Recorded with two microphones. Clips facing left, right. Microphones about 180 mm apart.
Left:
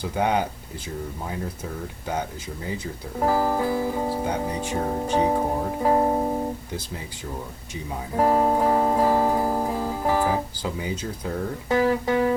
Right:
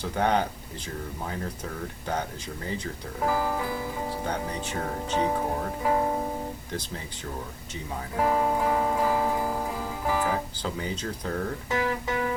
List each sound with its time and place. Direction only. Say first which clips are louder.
0.0 s speech: left 2 dB; 10° left (ahead or behind)
3.2 s speech: left 5 dB; 40° left (ahead or behind)
4.3 s speech: left 5 dB; 10° left (ahead or behind)
5.8 s speech: left 5 dB; 35° left (ahead or behind)
8.1 s music: left 5 dB; 40° left (ahead or behind)
10.6 s speech: left 3 dB; 10° left (ahead or behind)
11.7 s speech: left 8 dB; 40° left (ahead or behind)